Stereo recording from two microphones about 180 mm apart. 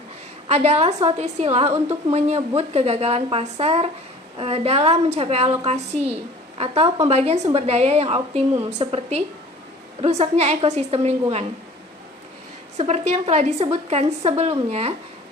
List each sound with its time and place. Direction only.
0.5 s a woman's voice: 35° right (ahead or behind)
6.6 s a woman's voice: 35° right (ahead or behind)
12.7 s a woman's voice: 35° right (ahead or behind)